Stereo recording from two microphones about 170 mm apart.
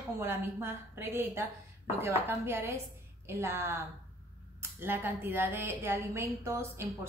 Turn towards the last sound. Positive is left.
turn(degrees=-15)  # may be behind; listen again after turning